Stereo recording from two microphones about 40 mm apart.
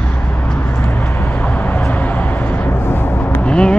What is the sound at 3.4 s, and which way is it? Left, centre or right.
Vehicle, left.